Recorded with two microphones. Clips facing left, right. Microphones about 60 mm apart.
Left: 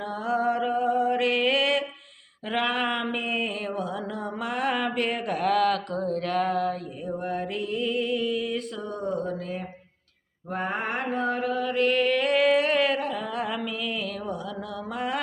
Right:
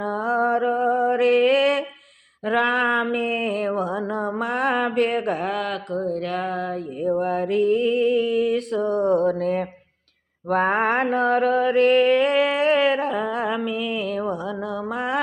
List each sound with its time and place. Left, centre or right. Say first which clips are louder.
0.0 s a sound: right 4 dB; right
2.4 s mantra: right 6 dB; right
5.5 s mantra: left 3 dB; right
7.0 s mantra: right 10 dB; right